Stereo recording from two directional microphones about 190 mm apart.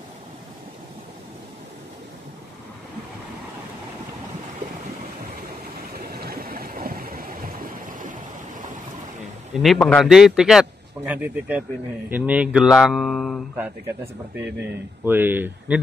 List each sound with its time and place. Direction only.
5.9 s a sound: 50° right (ahead or behind)
9.5 s a man's voice: centre (ahead or behind)
14.3 s speech: 10° right (ahead or behind)